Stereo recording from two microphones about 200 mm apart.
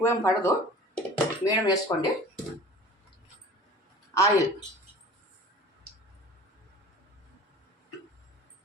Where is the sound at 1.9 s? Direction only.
15° left (ahead or behind).